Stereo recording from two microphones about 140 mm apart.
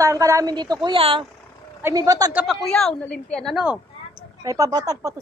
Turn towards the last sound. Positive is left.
turn(degrees=-25)  # may be behind; listen again after turning